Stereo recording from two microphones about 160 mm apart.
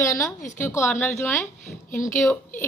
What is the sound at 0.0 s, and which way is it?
Speech, 20° left (ahead or behind).